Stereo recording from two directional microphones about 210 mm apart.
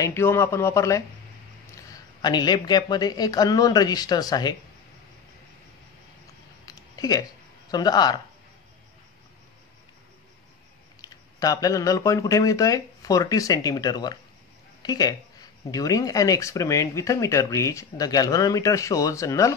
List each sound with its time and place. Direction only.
0.0 s a woman's voice: 10° left (ahead or behind)
6.6 s a sound: 15° left (ahead or behind)
7.7 s a woman's voice: 20° left (ahead or behind)
11.0 s speech: 15° left (ahead or behind)